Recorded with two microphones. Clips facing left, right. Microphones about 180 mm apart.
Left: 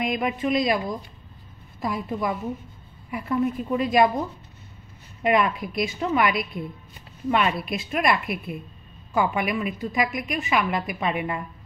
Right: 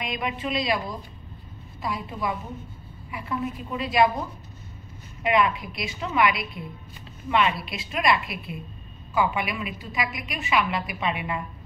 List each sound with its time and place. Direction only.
0.0 s a woman's voice: 50° left (ahead or behind)
5.2 s a woman's voice: 45° left (ahead or behind)